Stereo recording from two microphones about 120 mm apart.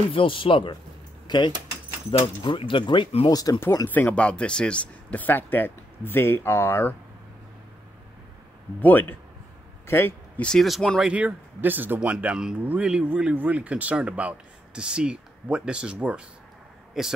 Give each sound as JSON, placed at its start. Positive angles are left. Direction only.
{"t": 0.1, "sound": "speech", "side_deg": 45}
{"t": 1.2, "sound": "keys jangling", "side_deg": 40}
{"t": 2.0, "sound": "speech", "side_deg": 45}
{"t": 3.3, "sound": "speech", "side_deg": 30}
{"t": 3.9, "sound": "speech", "side_deg": 10}
{"t": 9.8, "sound": "speech", "side_deg": 20}
{"t": 11.1, "sound": "speech", "side_deg": -10}